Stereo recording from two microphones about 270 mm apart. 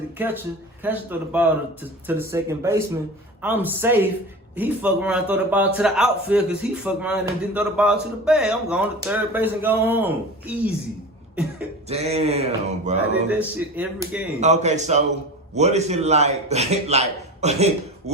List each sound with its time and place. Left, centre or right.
0.2 s a man's voice: centre
11.9 s a man's voice: right
13.4 s a man's voice: centre
14.4 s a man's voice: right